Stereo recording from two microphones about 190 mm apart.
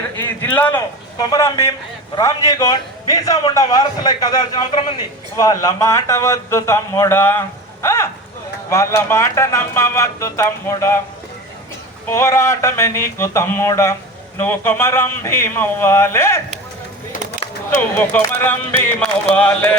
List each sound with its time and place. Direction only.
0.2 s a sound: 10° left (ahead or behind)
1.2 s a man's voice: 20° left (ahead or behind)
12.1 s speech: 15° left (ahead or behind)
17.7 s speech: 10° left (ahead or behind)